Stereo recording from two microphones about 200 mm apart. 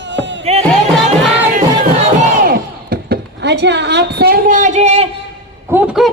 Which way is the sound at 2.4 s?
50° right (ahead or behind).